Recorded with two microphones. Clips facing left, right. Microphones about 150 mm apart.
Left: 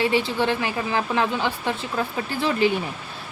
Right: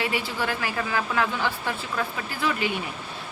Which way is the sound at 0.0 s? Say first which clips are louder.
Left 6 dB; 25° left (ahead or behind).